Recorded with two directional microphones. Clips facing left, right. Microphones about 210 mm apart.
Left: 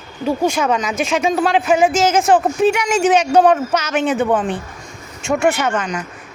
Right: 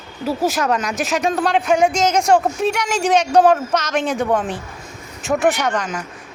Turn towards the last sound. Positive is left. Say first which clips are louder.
# left 2 dB
turn(degrees=5)  # may be behind; listen again after turning